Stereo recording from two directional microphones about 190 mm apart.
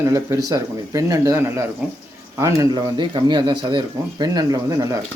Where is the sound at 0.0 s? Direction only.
15° right (ahead or behind).